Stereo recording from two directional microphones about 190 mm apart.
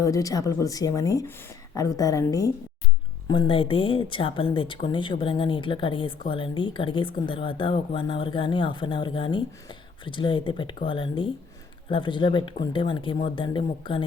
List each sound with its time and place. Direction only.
0.0 s speech: 15° left (ahead or behind)